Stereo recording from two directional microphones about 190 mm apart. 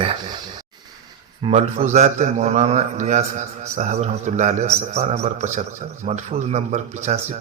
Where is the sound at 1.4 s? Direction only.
30° right (ahead or behind).